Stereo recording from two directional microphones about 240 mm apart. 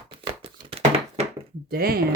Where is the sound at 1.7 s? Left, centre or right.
Right.